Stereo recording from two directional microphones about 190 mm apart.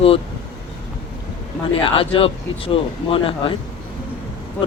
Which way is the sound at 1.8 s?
30° left (ahead or behind).